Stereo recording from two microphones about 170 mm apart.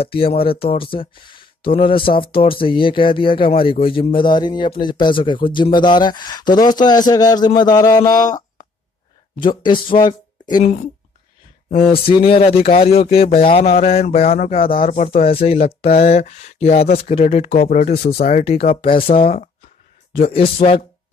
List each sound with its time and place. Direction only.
0.0 s speech: 35° left (ahead or behind)
9.9 s a sound: 25° left (ahead or behind)
11.8 s speech: 30° left (ahead or behind)